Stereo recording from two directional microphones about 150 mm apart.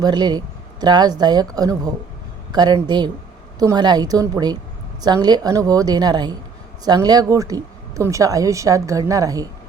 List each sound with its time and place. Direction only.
0.0 s speech: 30° right (ahead or behind)